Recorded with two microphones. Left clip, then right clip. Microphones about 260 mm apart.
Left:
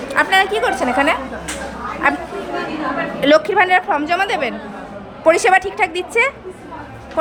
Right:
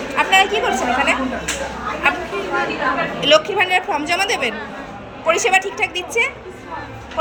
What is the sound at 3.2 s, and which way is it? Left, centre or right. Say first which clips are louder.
A woman's voice: left 3 dB; centre.